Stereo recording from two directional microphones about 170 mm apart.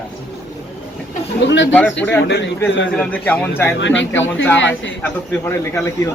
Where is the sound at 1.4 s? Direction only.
90° left.